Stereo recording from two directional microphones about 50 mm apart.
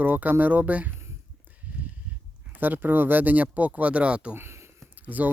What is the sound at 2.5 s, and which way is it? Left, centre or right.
Speech, right.